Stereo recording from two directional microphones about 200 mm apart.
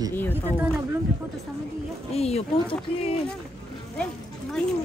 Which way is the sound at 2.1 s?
30° left (ahead or behind).